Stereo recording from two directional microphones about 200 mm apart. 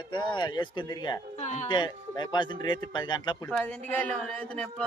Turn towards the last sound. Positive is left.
turn(degrees=5)  # may be behind; listen again after turning